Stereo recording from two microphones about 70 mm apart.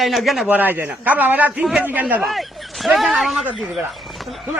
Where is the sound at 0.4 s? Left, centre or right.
Right.